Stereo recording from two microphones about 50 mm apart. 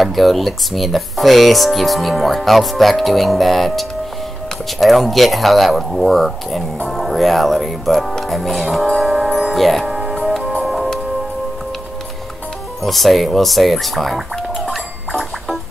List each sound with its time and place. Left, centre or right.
0.0 s speech: centre
10.6 s music: centre
12.8 s music: centre